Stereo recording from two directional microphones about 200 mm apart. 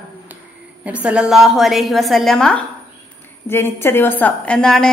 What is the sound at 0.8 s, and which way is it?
A woman's voice, 5° right (ahead or behind).